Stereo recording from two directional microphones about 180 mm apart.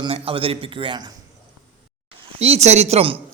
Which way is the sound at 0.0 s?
30° right (ahead or behind).